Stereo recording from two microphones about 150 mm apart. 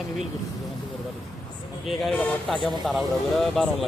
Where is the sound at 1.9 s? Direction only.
5° left (ahead or behind).